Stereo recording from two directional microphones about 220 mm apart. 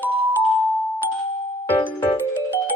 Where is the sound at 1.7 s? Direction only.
10° left (ahead or behind).